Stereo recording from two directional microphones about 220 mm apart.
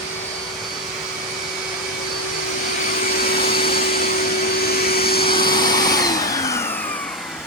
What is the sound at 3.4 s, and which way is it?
Vacuum cleaner, 45° left (ahead or behind).